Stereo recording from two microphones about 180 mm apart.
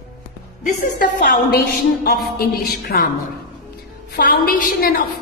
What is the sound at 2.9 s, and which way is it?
Speech, 50° left (ahead or behind).